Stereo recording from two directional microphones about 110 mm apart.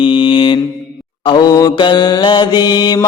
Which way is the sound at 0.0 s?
50° left (ahead or behind).